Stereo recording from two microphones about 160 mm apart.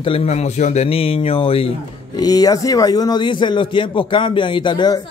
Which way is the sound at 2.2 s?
25° left (ahead or behind).